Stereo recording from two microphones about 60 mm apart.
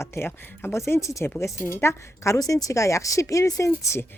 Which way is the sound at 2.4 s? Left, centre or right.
Left.